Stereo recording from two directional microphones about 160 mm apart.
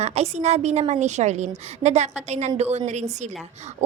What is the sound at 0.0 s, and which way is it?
A woman's voice, 40° right (ahead or behind).